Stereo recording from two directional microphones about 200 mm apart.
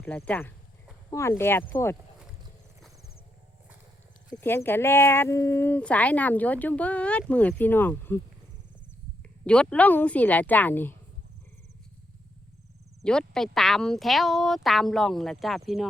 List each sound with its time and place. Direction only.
0.0 s speech: 10° left (ahead or behind)
4.3 s speech: 10° left (ahead or behind)
9.5 s speech: 5° left (ahead or behind)
13.1 s speech: 5° left (ahead or behind)